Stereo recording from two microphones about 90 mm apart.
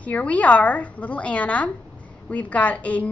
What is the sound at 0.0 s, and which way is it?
A woman's voice, 15° left (ahead or behind).